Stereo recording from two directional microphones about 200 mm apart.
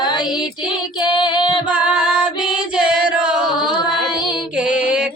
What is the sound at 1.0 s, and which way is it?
Female singing, 20° left (ahead or behind).